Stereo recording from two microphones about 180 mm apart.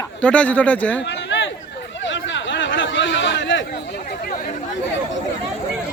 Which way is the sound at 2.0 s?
90° left.